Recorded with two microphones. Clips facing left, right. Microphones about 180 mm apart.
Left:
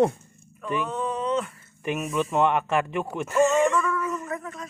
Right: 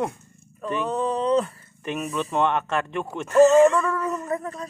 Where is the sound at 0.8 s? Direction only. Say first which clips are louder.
Right 6 dB; 35° right (ahead or behind).